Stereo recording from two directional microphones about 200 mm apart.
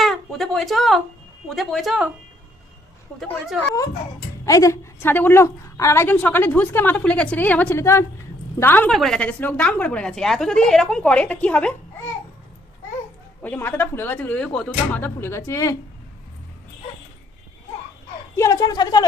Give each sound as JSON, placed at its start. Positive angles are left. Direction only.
{"t": 0.0, "sound": "a woman's voice", "side_deg": 0}
{"t": 4.4, "sound": "a woman's voice", "side_deg": 15}
{"t": 13.4, "sound": "a woman's voice", "side_deg": 10}
{"t": 18.3, "sound": "a woman's voice", "side_deg": 15}